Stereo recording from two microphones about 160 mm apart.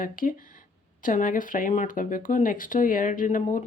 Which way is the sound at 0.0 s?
60° left (ahead or behind).